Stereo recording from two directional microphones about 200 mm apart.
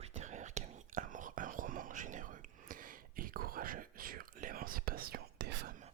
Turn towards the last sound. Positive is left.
turn(degrees=-50)  # may be behind; listen again after turning